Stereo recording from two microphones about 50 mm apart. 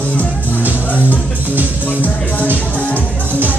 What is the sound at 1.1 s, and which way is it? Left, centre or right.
Music, right.